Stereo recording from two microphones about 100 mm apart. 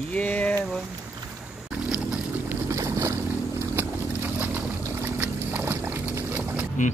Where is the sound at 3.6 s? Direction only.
25° right (ahead or behind).